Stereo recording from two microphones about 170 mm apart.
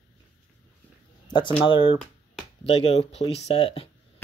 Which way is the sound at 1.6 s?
30° left (ahead or behind).